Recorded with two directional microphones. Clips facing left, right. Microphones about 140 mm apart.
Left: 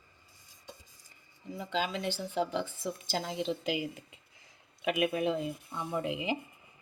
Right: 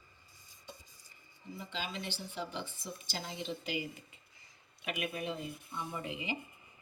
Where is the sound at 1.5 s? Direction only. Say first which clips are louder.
Left 8 dB; 90° left.